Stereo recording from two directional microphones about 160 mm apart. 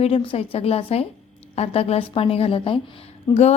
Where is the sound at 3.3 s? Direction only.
25° left (ahead or behind).